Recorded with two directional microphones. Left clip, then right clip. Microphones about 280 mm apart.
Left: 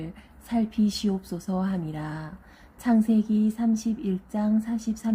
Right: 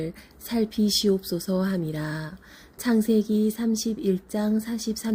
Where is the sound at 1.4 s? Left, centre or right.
Centre.